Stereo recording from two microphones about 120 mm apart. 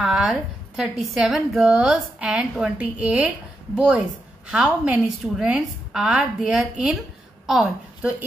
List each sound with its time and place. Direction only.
0.0 s a woman's voice: 5° right (ahead or behind)